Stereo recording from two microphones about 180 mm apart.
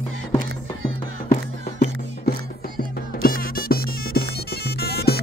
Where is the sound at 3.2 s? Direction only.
50° left (ahead or behind).